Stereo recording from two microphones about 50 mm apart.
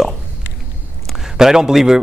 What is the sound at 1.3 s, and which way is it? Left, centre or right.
Speech, centre.